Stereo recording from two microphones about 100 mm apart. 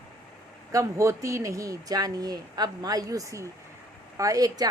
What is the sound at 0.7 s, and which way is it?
A woman's voice, 30° right (ahead or behind).